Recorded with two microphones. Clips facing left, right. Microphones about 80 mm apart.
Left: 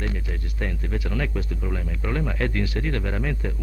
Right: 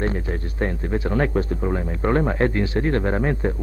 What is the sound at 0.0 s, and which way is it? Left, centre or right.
A man's voice, right.